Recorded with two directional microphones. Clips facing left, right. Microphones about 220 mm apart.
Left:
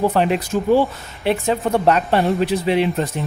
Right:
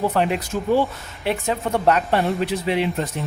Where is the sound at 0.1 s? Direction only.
30° left (ahead or behind).